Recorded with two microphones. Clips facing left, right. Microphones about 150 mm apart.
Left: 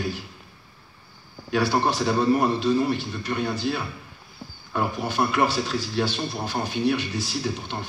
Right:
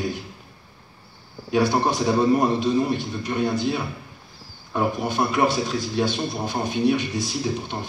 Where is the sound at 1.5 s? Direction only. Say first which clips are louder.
Right 2 dB; 15° right (ahead or behind).